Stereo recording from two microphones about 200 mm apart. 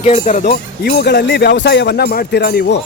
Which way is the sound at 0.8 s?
50° left (ahead or behind).